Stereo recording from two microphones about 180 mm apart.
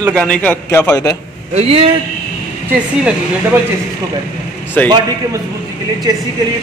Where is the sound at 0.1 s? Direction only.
5° left (ahead or behind).